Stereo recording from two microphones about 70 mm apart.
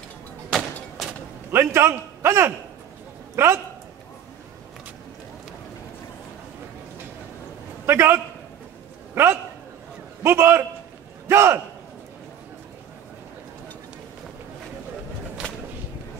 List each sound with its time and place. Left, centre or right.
1.5 s a man's voice: right
7.8 s a man's voice: right